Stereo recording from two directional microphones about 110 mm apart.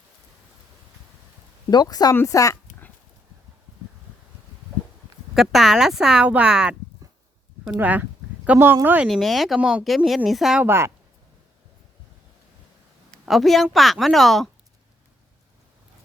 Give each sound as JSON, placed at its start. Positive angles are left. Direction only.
{"t": 1.7, "sound": "speech", "side_deg": 35}
{"t": 5.3, "sound": "speech", "side_deg": 0}
{"t": 7.8, "sound": "speech", "side_deg": -15}
{"t": 9.0, "sound": "speech", "side_deg": 0}
{"t": 10.6, "sound": "speech", "side_deg": -25}
{"t": 13.1, "sound": "speech", "side_deg": 0}